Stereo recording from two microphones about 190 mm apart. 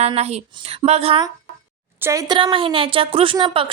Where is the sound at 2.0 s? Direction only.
15° right (ahead or behind).